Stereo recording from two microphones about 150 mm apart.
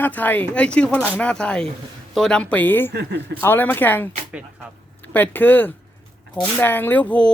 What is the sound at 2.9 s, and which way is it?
Speech, 90° right.